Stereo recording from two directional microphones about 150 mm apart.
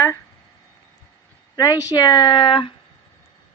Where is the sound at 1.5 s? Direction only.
20° left (ahead or behind).